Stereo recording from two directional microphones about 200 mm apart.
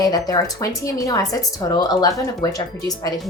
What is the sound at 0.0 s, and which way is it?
A woman's voice, 20° left (ahead or behind).